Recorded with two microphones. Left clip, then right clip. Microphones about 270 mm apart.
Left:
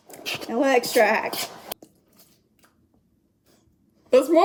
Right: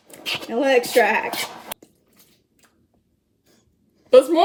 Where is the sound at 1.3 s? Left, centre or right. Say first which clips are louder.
Right 3 dB; centre.